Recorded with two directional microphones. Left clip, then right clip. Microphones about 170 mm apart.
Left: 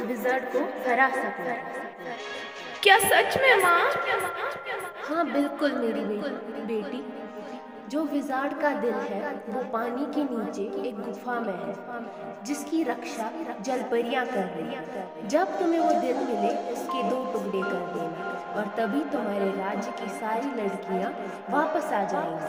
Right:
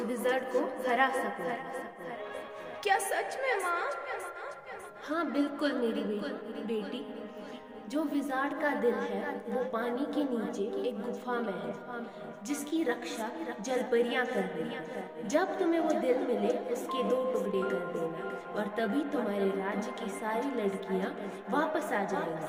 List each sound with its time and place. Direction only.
0.0 s a woman's voice: 25° left (ahead or behind)
2.8 s a woman's voice: 35° left (ahead or behind)